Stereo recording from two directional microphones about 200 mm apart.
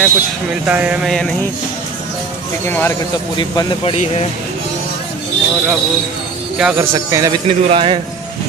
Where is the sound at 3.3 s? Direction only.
20° left (ahead or behind).